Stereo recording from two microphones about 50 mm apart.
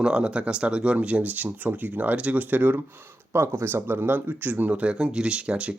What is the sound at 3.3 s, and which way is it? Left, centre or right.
Speech, right.